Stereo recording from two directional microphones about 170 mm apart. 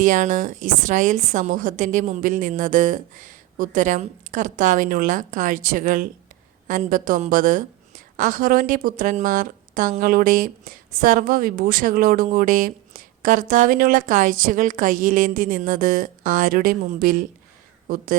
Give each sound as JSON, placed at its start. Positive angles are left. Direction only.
{"t": 0.0, "sound": "a woman's voice", "side_deg": -50}